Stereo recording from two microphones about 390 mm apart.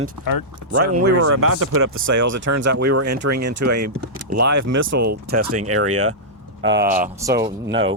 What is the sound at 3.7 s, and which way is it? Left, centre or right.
Speech, right.